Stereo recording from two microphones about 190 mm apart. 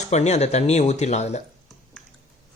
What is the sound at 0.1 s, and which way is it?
Speech, 35° left (ahead or behind).